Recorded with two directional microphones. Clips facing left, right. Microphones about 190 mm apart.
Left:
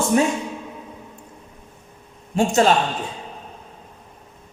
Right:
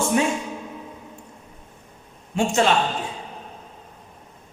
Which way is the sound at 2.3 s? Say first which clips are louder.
Left 3 dB; 40° left (ahead or behind).